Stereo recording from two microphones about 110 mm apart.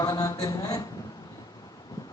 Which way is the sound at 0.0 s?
30° left (ahead or behind).